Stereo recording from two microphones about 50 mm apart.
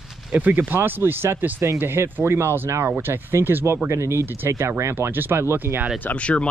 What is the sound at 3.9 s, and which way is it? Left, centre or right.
Speech, right.